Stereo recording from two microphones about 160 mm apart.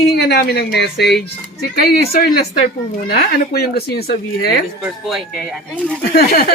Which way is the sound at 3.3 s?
75° left (ahead or behind).